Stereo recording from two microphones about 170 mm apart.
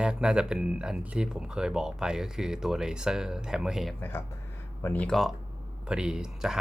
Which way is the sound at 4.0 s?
15° left (ahead or behind).